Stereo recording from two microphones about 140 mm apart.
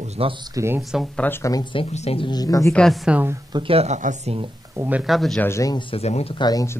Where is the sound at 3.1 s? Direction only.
15° right (ahead or behind).